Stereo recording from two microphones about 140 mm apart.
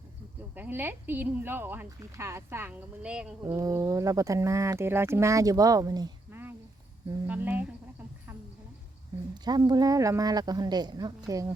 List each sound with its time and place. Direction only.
0.5 s speech: 15° right (ahead or behind)
3.4 s speech: 25° right (ahead or behind)
7.3 s speech: 10° right (ahead or behind)
9.3 s speech: 30° right (ahead or behind)